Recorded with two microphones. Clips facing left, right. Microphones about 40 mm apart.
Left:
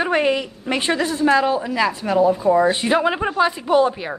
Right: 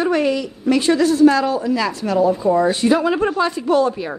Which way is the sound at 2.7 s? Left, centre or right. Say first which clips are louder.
Right 2 dB; left.